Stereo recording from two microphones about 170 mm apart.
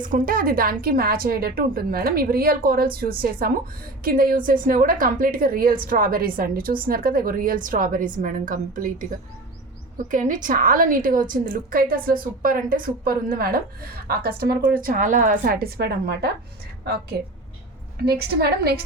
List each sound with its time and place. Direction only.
0.0 s a woman's voice: 55° right (ahead or behind)